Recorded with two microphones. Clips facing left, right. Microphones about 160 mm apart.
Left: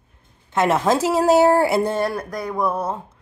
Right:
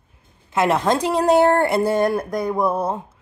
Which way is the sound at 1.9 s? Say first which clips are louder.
Right 4 dB; 20° right (ahead or behind).